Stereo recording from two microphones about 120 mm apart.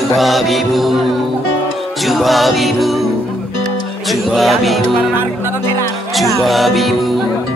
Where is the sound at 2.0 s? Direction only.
Centre (ahead or behind).